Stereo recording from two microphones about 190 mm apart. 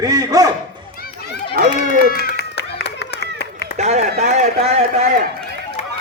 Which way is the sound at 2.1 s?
55° left (ahead or behind).